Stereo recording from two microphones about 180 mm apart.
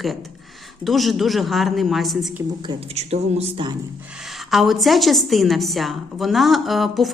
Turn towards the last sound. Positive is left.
turn(degrees=0)  # may be behind; listen again after turning